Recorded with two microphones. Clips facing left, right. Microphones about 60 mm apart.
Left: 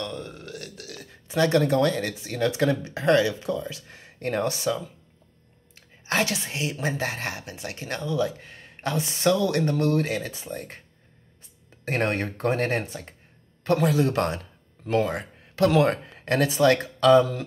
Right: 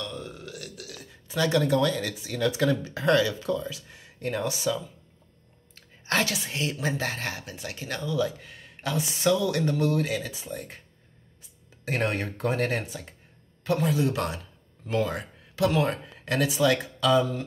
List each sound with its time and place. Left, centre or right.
0.0 s burping: left
1.2 s speech: left
3.7 s speech: left
5.8 s whispering: left
6.8 s speech: left
10.1 s speech: left
11.8 s speech: left
13.7 s speech: left
14.1 s speech: left
15.6 s speech: left
16.5 s speech: left